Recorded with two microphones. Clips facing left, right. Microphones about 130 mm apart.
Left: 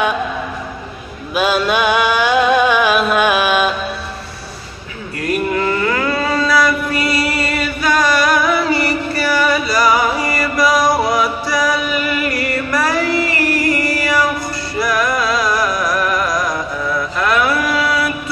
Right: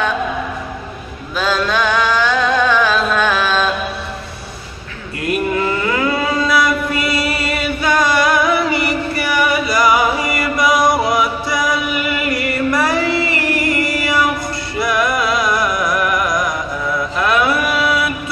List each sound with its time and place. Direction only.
1.3 s music: 15° left (ahead or behind)
5.9 s a sound: 15° right (ahead or behind)
14.8 s music: 20° right (ahead or behind)